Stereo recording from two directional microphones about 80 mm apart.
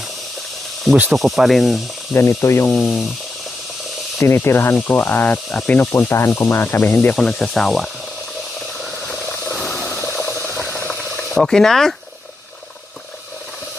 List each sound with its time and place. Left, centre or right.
1.1 s speech: centre
2.1 s speech: left
4.2 s speech: left; by 5.9 s centre
5.9 s speech: left
7.2 s speech: centre
8.8 s a sound: centre
9.3 s wild animals: left
9.6 s a sound: centre
10.0 s a sound: left
10.7 s boiling: centre